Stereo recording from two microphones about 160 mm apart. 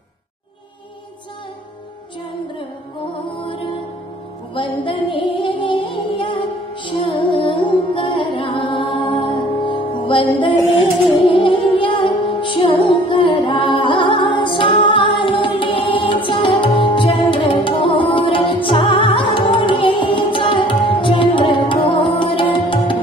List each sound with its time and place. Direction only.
4.6 s music: 30° left (ahead or behind)